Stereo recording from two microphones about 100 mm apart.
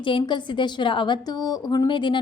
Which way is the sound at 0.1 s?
55° left (ahead or behind).